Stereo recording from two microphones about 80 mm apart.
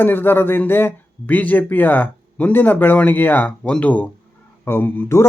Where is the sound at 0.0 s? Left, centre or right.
Left.